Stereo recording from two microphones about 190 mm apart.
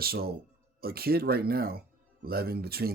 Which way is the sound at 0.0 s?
55° right (ahead or behind).